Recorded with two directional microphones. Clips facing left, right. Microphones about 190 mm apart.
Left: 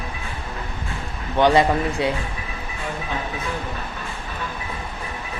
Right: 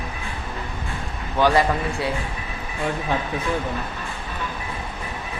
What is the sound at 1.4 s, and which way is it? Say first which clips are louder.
Speech: left 2 dB; 20° left (ahead or behind).